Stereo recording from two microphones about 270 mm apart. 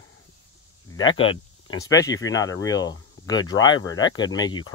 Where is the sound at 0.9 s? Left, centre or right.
Centre.